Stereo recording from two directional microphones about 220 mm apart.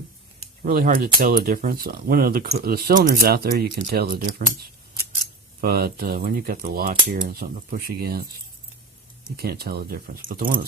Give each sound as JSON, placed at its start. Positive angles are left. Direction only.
{"t": 0.6, "sound": "speech", "side_deg": -40}
{"t": 5.5, "sound": "speech", "side_deg": -45}
{"t": 9.3, "sound": "speech", "side_deg": -45}